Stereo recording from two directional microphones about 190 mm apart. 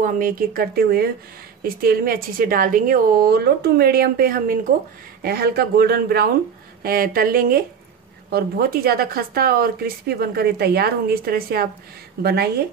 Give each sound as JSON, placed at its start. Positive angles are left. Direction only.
{"t": 0.0, "sound": "speech", "side_deg": -50}